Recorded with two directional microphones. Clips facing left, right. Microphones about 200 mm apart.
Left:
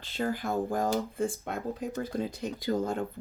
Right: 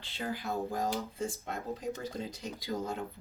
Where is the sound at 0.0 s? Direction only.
45° left (ahead or behind).